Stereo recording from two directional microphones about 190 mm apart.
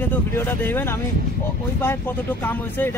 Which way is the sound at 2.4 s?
10° left (ahead or behind).